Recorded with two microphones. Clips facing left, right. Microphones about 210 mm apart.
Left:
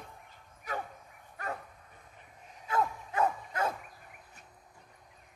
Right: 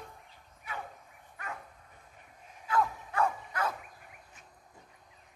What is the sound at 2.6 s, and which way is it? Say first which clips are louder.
Bow-wow: right 1 dB; 20° left (ahead or behind).